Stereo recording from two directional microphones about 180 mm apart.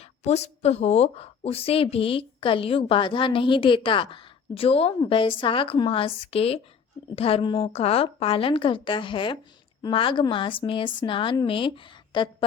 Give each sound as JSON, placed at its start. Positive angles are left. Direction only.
{"t": 0.3, "sound": "a woman's voice", "side_deg": 35}